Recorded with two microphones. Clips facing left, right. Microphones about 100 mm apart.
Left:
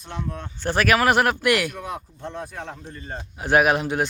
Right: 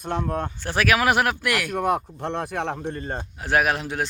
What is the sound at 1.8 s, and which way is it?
Speech, 65° right (ahead or behind).